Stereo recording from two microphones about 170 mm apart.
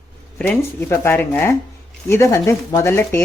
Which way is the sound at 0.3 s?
10° left (ahead or behind).